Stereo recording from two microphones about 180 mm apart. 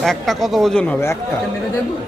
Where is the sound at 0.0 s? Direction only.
Centre (ahead or behind).